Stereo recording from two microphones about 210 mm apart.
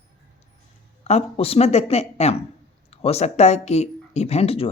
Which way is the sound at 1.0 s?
30° left (ahead or behind).